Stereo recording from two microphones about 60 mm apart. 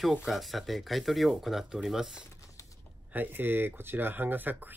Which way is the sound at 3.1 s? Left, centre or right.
Right.